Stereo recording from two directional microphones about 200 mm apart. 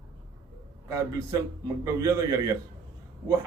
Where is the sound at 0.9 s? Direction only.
15° right (ahead or behind).